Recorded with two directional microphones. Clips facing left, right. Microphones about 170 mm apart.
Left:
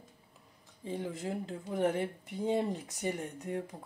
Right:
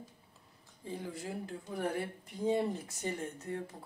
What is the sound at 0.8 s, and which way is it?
Speech, 20° left (ahead or behind).